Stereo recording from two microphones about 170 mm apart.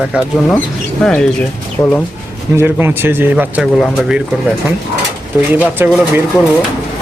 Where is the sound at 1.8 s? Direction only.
20° left (ahead or behind).